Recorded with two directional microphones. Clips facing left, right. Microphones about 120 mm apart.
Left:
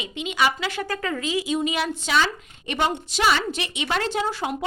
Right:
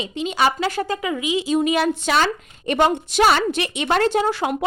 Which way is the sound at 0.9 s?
15° right (ahead or behind).